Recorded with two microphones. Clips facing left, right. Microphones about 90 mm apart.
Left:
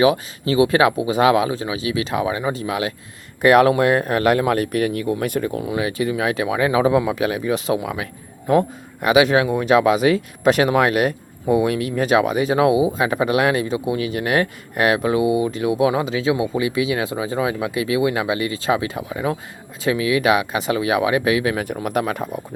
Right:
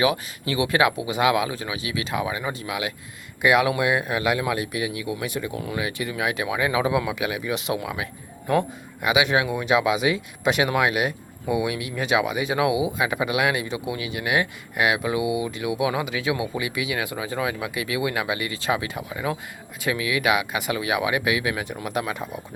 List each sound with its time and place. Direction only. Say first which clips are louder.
0.0 s speech: left 6 dB; 30° left (ahead or behind)
3.4 s speech: left 6 dB; 45° left (ahead or behind)
5.5 s speech: left 6 dB; 30° left (ahead or behind)
21.8 s speech: left 5 dB; 45° left (ahead or behind)